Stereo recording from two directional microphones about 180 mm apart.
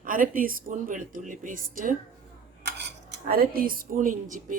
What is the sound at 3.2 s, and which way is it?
Speech, 55° right (ahead or behind).